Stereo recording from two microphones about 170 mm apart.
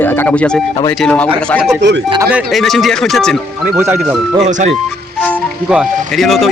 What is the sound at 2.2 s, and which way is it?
Speech, 10° right (ahead or behind).